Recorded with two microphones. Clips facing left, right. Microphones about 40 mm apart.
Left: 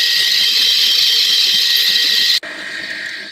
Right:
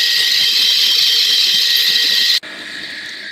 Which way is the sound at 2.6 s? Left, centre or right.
Left.